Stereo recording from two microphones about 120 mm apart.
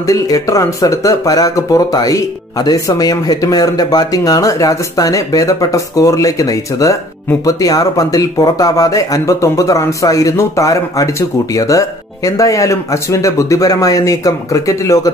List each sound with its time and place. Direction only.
0.0 s speech: 30° left (ahead or behind)